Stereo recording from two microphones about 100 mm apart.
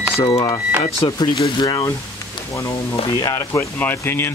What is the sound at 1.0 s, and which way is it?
Speech, 45° left (ahead or behind).